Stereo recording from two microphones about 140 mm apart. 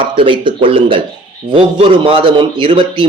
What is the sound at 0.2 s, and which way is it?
Speech, 40° right (ahead or behind).